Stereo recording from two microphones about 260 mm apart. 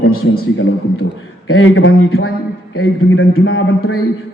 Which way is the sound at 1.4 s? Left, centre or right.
Left.